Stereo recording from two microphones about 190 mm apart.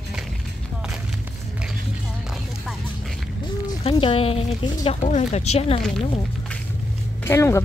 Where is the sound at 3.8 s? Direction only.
30° left (ahead or behind).